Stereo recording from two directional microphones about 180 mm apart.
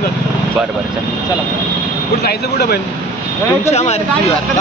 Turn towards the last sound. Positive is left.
turn(degrees=35)  # may be behind; listen again after turning